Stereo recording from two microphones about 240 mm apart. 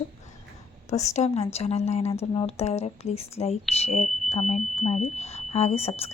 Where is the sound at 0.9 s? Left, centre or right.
Left.